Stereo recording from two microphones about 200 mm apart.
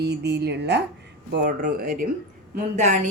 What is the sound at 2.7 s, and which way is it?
Speech, 35° right (ahead or behind).